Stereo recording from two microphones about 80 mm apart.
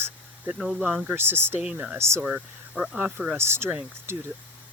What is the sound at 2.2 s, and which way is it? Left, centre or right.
Speech, right.